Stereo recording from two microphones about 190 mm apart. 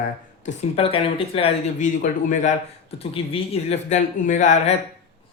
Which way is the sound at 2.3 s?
40° left (ahead or behind).